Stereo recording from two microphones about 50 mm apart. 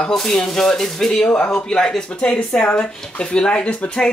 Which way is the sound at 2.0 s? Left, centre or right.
Left.